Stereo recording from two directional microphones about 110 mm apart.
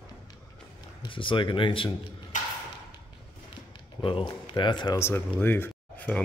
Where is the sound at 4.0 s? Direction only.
50° left (ahead or behind).